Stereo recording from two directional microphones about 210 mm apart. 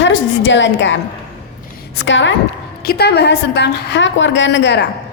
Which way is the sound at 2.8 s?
50° left (ahead or behind).